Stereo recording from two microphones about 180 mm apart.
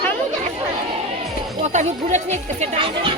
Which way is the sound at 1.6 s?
40° right (ahead or behind).